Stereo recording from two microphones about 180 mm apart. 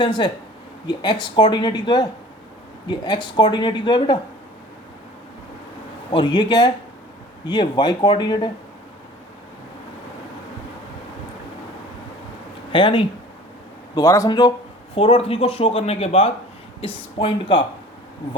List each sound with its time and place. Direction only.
0.0 s speech: 25° left (ahead or behind)
6.1 s speech: 25° left (ahead or behind)
12.7 s speech: 30° left (ahead or behind)
13.9 s speech: 15° left (ahead or behind)